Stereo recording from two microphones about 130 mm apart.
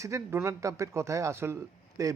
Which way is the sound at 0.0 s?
20° right (ahead or behind).